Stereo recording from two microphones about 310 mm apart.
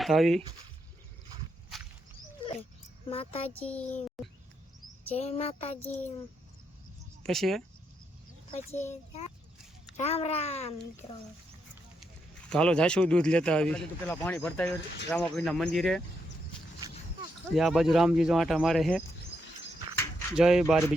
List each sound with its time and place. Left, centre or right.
0.0 s speech: centre
3.1 s a child's voice: centre
3.6 s a man's voice: centre
5.0 s a child's voice: centre
7.2 s speech: centre
8.4 s a child's voice: centre
12.5 s a man's voice: centre
17.5 s a man's voice: centre
20.0 s a sound: centre